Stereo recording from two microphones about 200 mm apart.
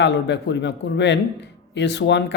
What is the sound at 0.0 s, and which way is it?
A man's voice, 60° left (ahead or behind).